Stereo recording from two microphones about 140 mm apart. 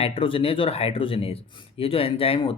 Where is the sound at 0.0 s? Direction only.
40° left (ahead or behind).